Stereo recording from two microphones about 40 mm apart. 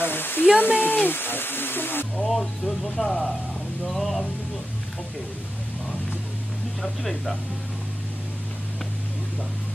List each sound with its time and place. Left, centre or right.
0.0 s a sound: left
2.2 s speech: centre
6.8 s speech: centre